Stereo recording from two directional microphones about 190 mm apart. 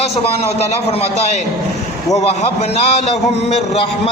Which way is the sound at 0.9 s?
35° left (ahead or behind).